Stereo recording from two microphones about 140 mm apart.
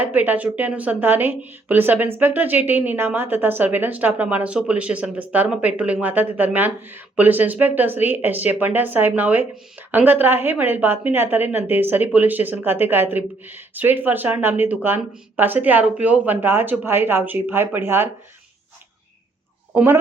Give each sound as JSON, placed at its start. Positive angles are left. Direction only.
{"t": 0.0, "sound": "a woman's voice", "side_deg": -10}
{"t": 19.7, "sound": "a woman's voice", "side_deg": -15}